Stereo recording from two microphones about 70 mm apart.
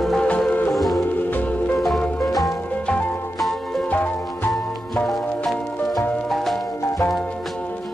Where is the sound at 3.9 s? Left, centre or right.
Left.